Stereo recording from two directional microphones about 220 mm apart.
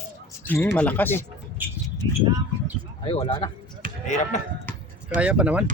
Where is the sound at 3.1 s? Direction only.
25° left (ahead or behind).